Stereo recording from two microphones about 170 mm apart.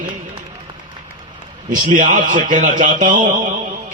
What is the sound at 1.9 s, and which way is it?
A man's voice, 50° right (ahead or behind).